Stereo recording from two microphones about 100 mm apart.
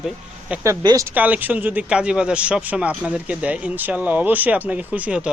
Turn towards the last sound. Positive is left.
turn(degrees=-10)  # may be behind; listen again after turning